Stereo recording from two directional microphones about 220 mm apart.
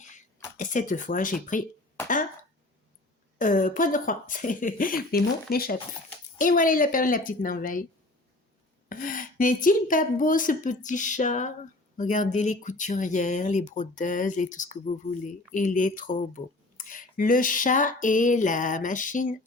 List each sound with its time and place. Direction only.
0.5 s speech: 35° left (ahead or behind)
3.3 s speech: 35° left (ahead or behind)
8.9 s speech: 40° left (ahead or behind)